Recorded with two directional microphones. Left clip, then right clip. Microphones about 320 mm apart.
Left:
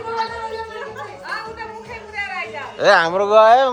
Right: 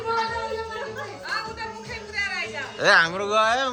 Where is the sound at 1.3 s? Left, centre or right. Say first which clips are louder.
Left 1 dB; centre.